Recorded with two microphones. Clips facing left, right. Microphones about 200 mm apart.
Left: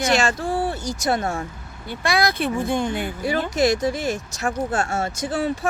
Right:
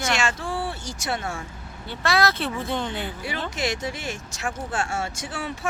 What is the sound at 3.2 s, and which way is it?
Speech, 45° left (ahead or behind).